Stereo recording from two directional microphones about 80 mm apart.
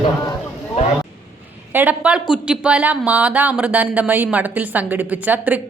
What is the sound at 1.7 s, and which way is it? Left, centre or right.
Speech, right.